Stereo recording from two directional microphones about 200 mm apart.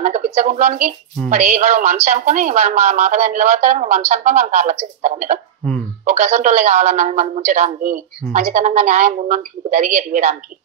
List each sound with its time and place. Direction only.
0.0 s speech: 35° right (ahead or behind)